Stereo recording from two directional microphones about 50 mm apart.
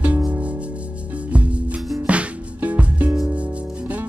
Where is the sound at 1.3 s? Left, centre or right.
Right.